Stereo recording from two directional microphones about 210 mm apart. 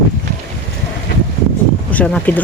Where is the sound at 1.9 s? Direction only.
5° left (ahead or behind).